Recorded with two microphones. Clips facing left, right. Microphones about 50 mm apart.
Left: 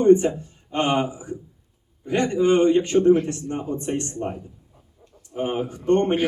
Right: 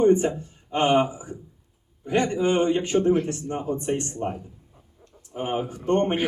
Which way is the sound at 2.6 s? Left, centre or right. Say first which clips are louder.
Left 4 dB; centre.